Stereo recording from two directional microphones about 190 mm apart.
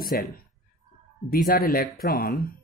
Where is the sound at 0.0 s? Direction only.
50° left (ahead or behind).